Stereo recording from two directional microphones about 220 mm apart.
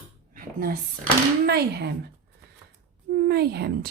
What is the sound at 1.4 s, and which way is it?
Speech, 45° right (ahead or behind).